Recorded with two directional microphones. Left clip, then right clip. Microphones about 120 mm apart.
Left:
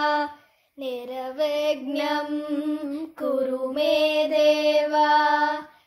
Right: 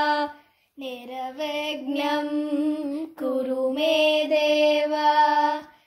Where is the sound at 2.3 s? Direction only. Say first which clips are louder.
Right 2 dB; 30° right (ahead or behind).